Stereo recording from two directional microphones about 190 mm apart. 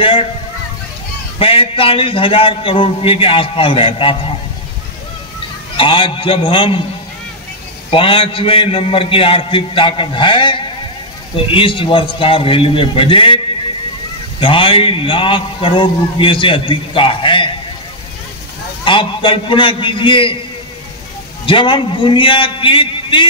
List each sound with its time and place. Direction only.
0.0 s speech: 30° left (ahead or behind)
1.4 s a man's voice: 30° left (ahead or behind)
5.8 s a man's voice: 25° left (ahead or behind)
7.9 s a man's voice: 25° left (ahead or behind)
14.4 s a man's voice: 30° left (ahead or behind)
18.9 s a man's voice: 25° left (ahead or behind)
21.5 s a man's voice: 25° left (ahead or behind)